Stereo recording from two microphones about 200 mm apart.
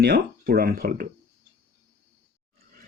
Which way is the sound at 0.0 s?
50° right (ahead or behind).